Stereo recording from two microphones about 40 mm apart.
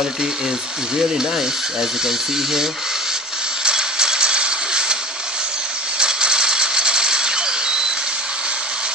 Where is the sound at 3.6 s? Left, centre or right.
Centre.